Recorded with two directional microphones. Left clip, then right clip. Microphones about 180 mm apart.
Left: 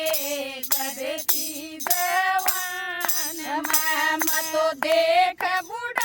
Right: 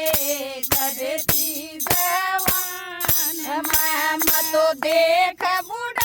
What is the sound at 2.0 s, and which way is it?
Music, 50° right (ahead or behind).